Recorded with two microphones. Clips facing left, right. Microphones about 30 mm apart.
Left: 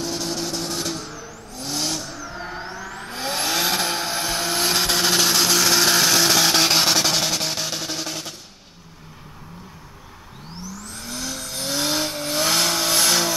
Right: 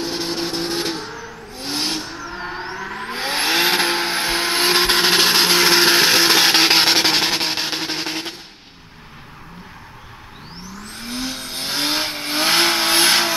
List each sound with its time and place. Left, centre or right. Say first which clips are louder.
0.0 s vehicle: right 3 dB; right
10.6 s vehicle: right 2 dB; right